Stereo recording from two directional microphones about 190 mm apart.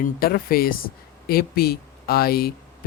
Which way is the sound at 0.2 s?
50° left (ahead or behind).